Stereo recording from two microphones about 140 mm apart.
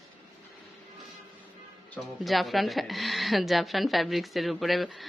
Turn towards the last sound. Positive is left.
turn(degrees=0)  # may be behind; listen again after turning